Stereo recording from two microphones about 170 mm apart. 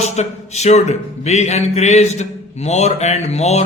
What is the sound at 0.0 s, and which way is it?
Speech, 40° left (ahead or behind).